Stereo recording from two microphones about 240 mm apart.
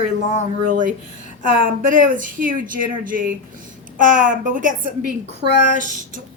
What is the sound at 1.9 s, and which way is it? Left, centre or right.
Speech, right.